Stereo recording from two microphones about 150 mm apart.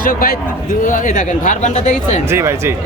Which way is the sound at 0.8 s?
60° left (ahead or behind).